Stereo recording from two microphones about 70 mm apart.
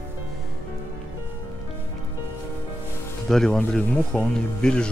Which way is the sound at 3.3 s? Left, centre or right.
Centre.